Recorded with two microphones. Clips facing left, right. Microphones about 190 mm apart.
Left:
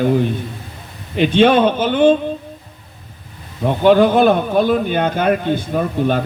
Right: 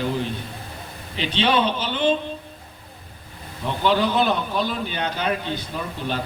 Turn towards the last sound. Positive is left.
turn(degrees=50)  # may be behind; listen again after turning